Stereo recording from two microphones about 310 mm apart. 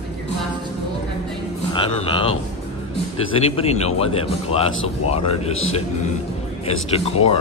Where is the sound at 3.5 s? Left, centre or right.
Centre.